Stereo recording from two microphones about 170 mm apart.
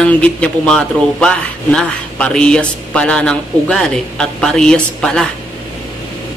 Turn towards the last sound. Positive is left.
turn(degrees=5)  # may be behind; listen again after turning